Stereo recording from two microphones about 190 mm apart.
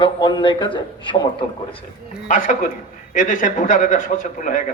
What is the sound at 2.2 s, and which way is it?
A man's voice, 45° left (ahead or behind).